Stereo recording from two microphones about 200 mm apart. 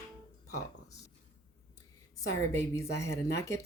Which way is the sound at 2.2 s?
15° left (ahead or behind).